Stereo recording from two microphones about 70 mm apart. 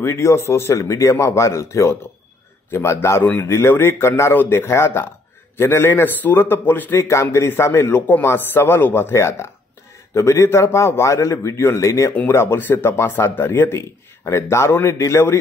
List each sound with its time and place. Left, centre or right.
0.0 s a man's voice: left
12.1 s a man's voice: left